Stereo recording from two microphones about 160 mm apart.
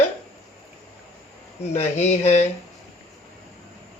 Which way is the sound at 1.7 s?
40° left (ahead or behind).